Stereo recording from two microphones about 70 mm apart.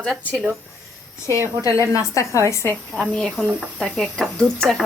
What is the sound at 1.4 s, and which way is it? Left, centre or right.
A woman's voice, left.